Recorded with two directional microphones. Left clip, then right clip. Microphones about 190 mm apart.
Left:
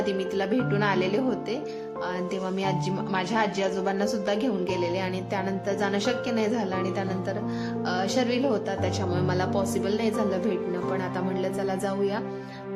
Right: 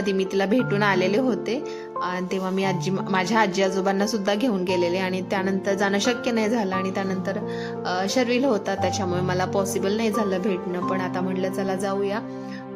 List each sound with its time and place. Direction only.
0.0 s speech: 30° right (ahead or behind)
2.6 s speech: 30° right (ahead or behind)
7.9 s speech: 25° right (ahead or behind)